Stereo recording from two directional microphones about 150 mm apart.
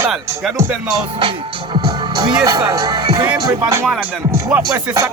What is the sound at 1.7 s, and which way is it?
Music, 30° right (ahead or behind).